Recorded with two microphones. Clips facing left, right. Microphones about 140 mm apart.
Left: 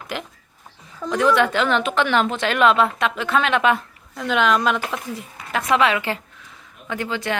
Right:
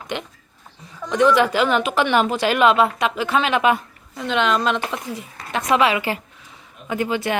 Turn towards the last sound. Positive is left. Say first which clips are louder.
# right 3 dB
turn(degrees=-15)  # may be behind; listen again after turning